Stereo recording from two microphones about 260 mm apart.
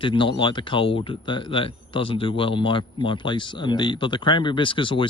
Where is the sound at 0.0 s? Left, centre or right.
Centre.